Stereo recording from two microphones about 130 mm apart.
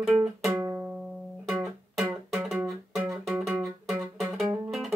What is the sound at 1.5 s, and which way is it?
Music, centre (ahead or behind).